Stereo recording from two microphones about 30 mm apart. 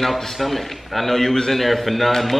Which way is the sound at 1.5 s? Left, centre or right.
Centre.